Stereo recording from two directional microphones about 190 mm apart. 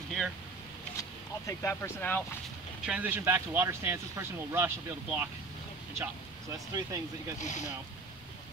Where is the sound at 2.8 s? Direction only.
5° right (ahead or behind).